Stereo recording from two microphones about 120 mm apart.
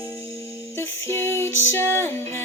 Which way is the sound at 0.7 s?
20° left (ahead or behind).